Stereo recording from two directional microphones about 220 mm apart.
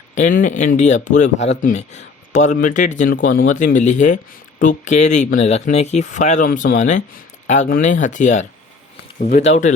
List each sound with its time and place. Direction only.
0.1 s speech: 35° left (ahead or behind)